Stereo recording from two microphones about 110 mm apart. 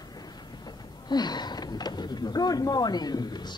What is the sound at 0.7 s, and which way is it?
Speech, 40° left (ahead or behind).